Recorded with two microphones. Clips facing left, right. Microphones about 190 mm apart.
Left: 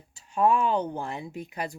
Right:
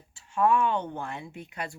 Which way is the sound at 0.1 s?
35° left (ahead or behind).